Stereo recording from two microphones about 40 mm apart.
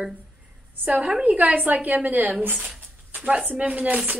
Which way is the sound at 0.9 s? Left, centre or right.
Right.